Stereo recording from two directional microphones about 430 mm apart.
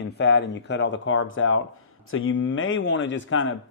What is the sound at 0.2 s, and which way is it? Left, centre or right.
Speech, left.